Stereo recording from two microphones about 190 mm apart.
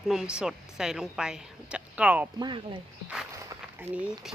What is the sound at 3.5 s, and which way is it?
Speech, 10° right (ahead or behind).